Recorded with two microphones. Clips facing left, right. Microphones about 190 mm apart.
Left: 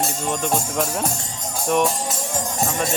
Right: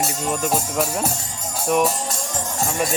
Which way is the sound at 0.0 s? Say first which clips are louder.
Right 1 dB; 5° right (ahead or behind).